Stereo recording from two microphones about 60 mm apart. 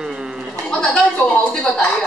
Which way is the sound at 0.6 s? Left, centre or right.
Centre.